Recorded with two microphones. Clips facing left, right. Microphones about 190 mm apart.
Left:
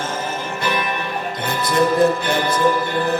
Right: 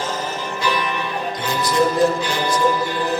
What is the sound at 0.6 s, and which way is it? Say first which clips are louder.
Music: right 1 dB; 55° left (ahead or behind).